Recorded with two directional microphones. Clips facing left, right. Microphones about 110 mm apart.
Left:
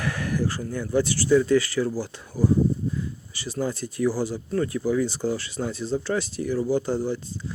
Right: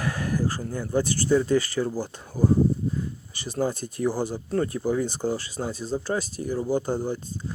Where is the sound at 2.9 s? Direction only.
50° right (ahead or behind).